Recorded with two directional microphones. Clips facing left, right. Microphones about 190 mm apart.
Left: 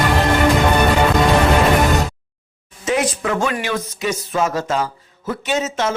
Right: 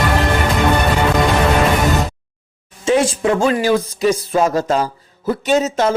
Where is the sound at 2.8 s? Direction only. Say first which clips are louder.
Right 5 dB; 30° right (ahead or behind).